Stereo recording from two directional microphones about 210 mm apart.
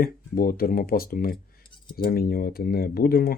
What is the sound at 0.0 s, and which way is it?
Speech, 45° left (ahead or behind).